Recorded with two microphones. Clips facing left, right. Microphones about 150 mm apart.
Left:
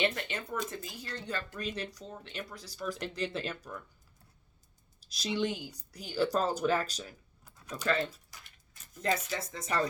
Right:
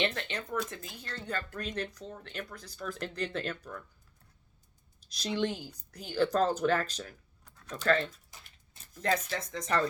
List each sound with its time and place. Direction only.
0.0 s speech: 5° left (ahead or behind)
5.1 s speech: 5° left (ahead or behind)
8.3 s a sound: 20° right (ahead or behind)
9.0 s speech: 5° left (ahead or behind)